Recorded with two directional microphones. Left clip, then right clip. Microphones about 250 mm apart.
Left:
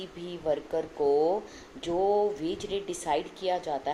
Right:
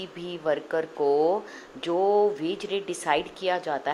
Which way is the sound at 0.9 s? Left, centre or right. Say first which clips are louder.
Right 2 dB; right.